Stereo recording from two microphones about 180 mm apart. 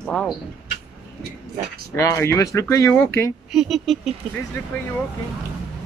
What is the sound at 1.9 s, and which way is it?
Speech, 15° left (ahead or behind).